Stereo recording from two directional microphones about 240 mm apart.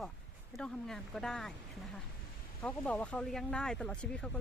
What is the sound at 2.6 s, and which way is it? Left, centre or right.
Speech, centre.